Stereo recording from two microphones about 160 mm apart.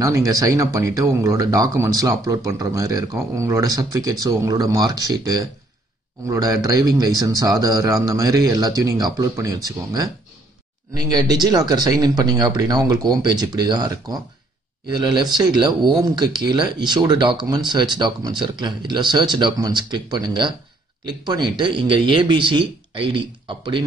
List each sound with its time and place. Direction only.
0.0 s speech: 20° right (ahead or behind)